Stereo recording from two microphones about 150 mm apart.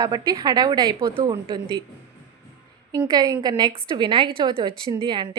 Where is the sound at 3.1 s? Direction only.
25° right (ahead or behind).